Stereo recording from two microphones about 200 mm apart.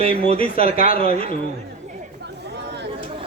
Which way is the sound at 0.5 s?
45° left (ahead or behind).